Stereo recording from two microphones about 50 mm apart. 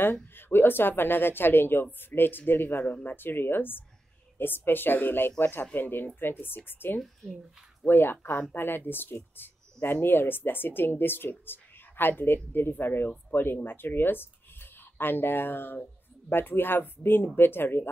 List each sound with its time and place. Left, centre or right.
0.0 s speech: left